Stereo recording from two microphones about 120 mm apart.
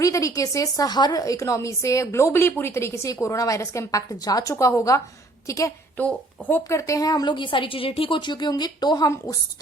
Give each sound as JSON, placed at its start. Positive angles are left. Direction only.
{"t": 0.0, "sound": "a woman's voice", "side_deg": 25}
{"t": 6.0, "sound": "speech", "side_deg": 10}
{"t": 6.7, "sound": "a woman's voice", "side_deg": 25}